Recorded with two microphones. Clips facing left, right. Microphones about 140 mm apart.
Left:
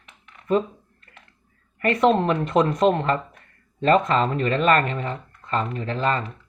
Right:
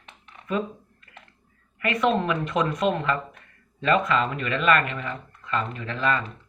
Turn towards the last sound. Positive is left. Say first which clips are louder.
# left 2 dB
turn(degrees=30)  # may be behind; listen again after turning